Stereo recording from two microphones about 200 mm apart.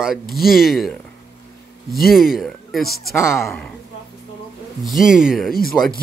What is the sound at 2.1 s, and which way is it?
Speech, centre (ahead or behind).